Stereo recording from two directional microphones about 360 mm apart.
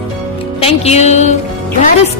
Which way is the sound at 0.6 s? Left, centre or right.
Centre.